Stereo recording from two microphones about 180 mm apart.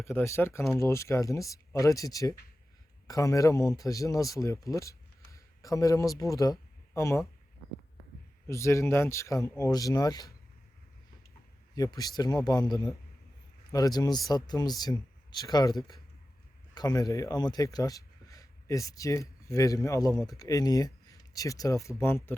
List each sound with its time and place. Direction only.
0.0 s speech: 15° left (ahead or behind)
8.4 s speech: 15° left (ahead or behind)
11.7 s speech: 20° left (ahead or behind)